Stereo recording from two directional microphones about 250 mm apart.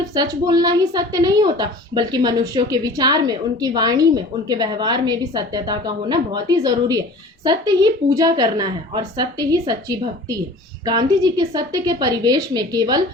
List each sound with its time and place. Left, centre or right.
0.1 s a woman's voice: centre